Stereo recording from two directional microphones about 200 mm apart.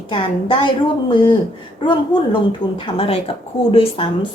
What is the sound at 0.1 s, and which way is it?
Speech, 25° left (ahead or behind).